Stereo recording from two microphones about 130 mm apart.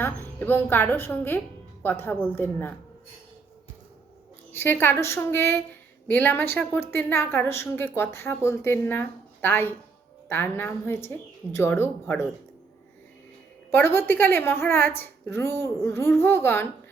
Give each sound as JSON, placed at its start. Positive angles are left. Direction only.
{"t": 0.0, "sound": "a woman's voice", "side_deg": 15}
{"t": 4.5, "sound": "a woman's voice", "side_deg": 15}
{"t": 13.7, "sound": "a woman's voice", "side_deg": 15}